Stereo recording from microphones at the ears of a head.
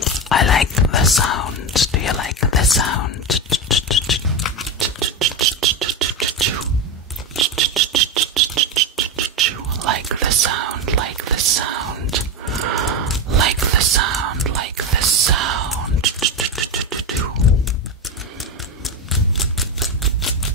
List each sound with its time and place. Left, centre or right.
0.0 s whispering: left
4.7 s a sound: right
13.3 s whispering: right